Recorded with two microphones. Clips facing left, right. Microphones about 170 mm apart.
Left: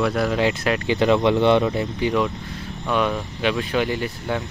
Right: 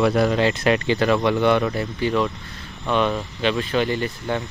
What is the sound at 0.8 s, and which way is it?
Speech, 20° left (ahead or behind).